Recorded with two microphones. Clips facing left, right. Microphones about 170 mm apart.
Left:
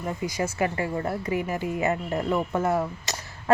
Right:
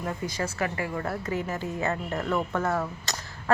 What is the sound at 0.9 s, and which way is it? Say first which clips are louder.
A woman's voice: left 3 dB; 20° left (ahead or behind).